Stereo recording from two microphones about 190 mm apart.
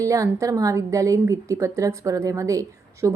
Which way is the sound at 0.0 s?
15° right (ahead or behind).